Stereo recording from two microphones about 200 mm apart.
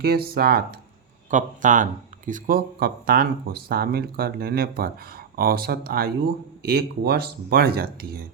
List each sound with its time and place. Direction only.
0.0 s speech: 50° right (ahead or behind)